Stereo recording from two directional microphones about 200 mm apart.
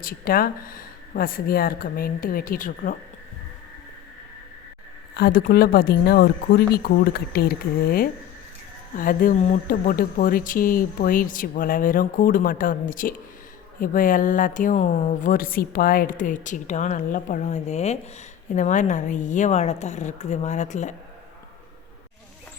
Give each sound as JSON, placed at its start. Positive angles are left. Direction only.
{"t": 0.0, "sound": "speech", "side_deg": 45}
{"t": 5.1, "sound": "speech", "side_deg": 50}